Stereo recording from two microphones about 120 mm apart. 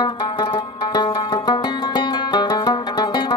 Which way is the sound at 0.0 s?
35° left (ahead or behind).